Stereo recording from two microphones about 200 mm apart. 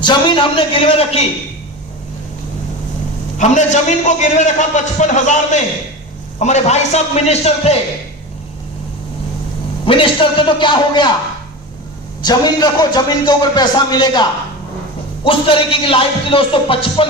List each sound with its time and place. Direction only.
0.0 s speech: 25° left (ahead or behind)
3.3 s a man's voice: 35° left (ahead or behind)
9.8 s speech: 25° left (ahead or behind)
12.2 s speech: 20° left (ahead or behind)